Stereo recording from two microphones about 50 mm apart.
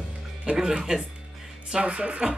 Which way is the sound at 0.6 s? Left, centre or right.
Centre.